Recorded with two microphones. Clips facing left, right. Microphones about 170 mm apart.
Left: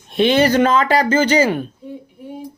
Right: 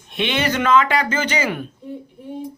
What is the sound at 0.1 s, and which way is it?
Speech, 35° left (ahead or behind).